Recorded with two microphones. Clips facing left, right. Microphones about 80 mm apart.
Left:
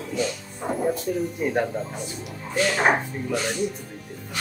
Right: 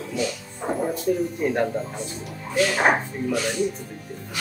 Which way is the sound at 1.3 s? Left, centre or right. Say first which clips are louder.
Even; centre.